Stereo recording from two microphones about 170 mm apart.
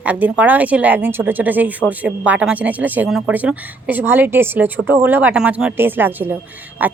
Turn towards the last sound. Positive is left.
turn(degrees=-10)  # may be behind; listen again after turning